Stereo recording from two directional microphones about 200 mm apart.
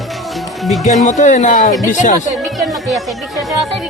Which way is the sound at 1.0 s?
40° left (ahead or behind).